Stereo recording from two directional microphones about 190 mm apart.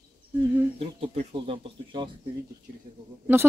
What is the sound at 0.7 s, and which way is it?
Speech, 30° right (ahead or behind).